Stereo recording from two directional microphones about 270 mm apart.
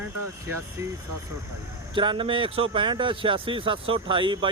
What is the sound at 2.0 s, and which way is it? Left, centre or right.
Speech, centre.